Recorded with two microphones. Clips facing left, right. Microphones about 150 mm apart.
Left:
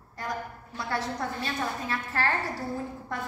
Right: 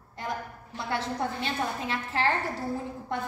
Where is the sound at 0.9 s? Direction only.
25° right (ahead or behind).